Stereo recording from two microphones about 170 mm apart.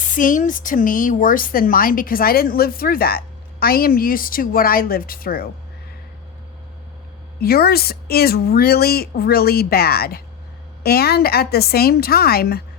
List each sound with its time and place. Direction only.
0.1 s speech: 50° left (ahead or behind)
7.3 s speech: 65° left (ahead or behind)